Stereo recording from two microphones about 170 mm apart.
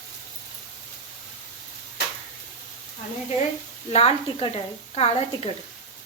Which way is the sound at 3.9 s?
35° left (ahead or behind).